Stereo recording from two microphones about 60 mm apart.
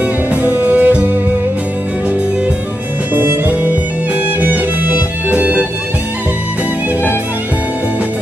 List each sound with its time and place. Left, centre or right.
0.4 s music: right
3.2 s music: right